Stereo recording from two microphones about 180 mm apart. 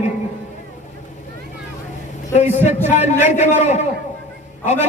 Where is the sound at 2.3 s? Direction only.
40° left (ahead or behind).